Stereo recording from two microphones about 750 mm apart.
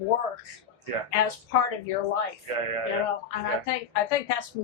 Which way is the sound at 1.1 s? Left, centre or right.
Left.